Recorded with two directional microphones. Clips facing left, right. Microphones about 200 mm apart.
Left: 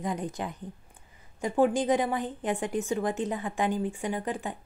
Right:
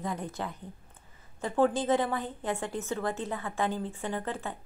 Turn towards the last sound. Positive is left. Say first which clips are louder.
# left 3 dB
turn(degrees=15)  # may be behind; listen again after turning